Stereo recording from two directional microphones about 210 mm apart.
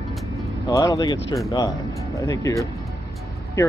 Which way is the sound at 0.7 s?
15° left (ahead or behind).